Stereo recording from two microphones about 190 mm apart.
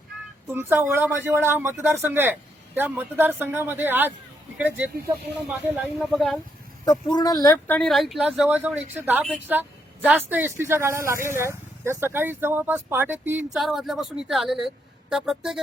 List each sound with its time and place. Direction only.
0.5 s speech: 15° right (ahead or behind)
6.8 s speech: 20° left (ahead or behind)
7.8 s speech: centre (ahead or behind)